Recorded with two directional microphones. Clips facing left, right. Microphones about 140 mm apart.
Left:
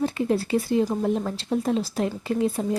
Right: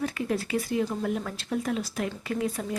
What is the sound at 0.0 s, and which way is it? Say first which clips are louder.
Speech: left 5 dB; 30° left (ahead or behind).